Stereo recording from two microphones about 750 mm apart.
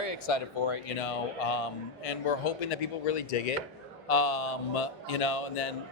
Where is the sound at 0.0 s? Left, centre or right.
Left.